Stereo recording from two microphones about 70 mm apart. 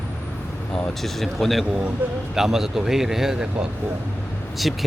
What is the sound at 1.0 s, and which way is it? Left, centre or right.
A man's voice, centre.